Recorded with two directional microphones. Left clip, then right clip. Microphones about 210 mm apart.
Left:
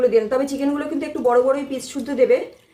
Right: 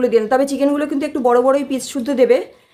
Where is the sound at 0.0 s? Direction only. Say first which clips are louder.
Right 3 dB; 50° right (ahead or behind).